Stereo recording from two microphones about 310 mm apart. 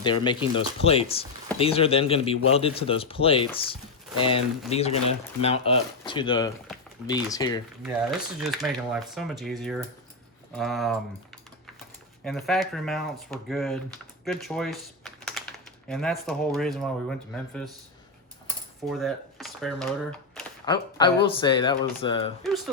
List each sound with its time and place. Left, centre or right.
0.0 s speech: centre
8.4 s speech: centre
12.2 s speech: centre
14.3 s typing: centre
15.9 s speech: centre
18.9 s speech: centre
20.7 s speech: centre
22.4 s speech: centre